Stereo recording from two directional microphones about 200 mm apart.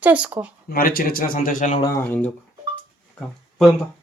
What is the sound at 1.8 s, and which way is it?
Speech, 15° left (ahead or behind).